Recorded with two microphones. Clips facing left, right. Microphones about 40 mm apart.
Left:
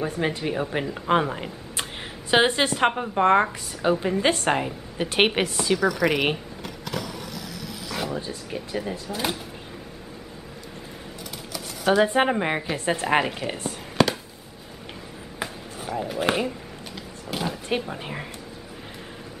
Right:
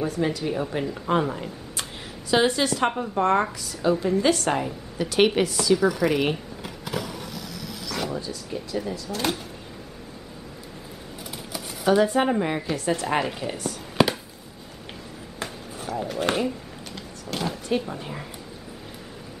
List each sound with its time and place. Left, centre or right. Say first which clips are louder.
0.0 s a woman's voice: right 1 dB; left
5.8 s speech: right 1 dB; centre
6.6 s vehicle: right 1 dB; centre
7.8 s a sound: even; centre
8.2 s a woman's voice: even; left
9.1 s speech: right 2 dB; centre
12.0 s a woman's voice: left 1 dB; left
13.2 s speech: left 1 dB; centre
13.5 s speech: even; left
14.0 s a sound: even; centre
15.4 s a sound: left 1 dB; centre
17.6 s speech: right 1 dB; left